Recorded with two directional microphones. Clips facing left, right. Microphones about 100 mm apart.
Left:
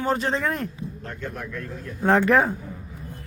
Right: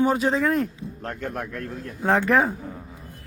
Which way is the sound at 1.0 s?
55° right (ahead or behind).